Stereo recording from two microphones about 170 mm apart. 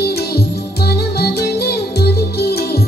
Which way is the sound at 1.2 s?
70° left (ahead or behind).